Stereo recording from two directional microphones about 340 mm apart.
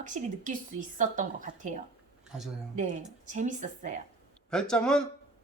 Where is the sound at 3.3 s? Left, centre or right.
Right.